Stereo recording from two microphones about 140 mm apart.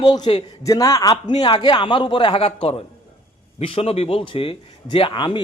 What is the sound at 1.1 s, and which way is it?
A man's voice, 40° left (ahead or behind).